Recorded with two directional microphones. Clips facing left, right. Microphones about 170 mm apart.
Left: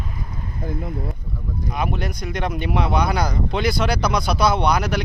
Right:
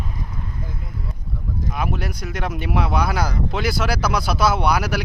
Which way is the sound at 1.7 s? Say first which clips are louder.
Left 2 dB; 5° right (ahead or behind).